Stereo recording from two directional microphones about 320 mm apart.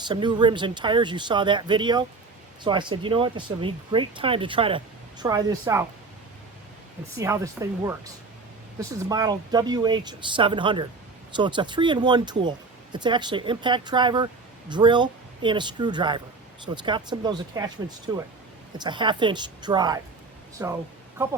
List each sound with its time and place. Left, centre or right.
0.1 s speech: centre
7.2 s speech: centre